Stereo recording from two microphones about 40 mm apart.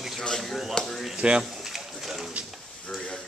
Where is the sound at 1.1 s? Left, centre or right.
Right.